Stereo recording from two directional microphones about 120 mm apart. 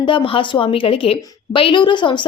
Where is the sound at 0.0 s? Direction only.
45° left (ahead or behind).